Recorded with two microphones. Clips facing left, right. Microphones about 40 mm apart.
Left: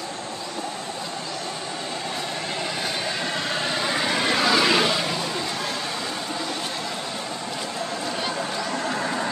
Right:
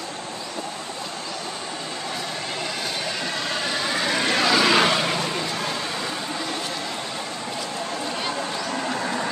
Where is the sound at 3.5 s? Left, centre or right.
Centre.